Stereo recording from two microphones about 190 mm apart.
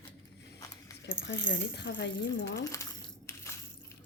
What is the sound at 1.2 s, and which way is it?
Speech, 70° left (ahead or behind).